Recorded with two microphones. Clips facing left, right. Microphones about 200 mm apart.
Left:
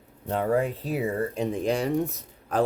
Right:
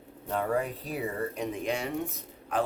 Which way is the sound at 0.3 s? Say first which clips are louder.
Left 5 dB; 30° left (ahead or behind).